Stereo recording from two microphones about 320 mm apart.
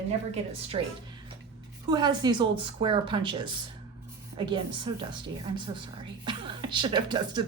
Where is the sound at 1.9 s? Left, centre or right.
Centre.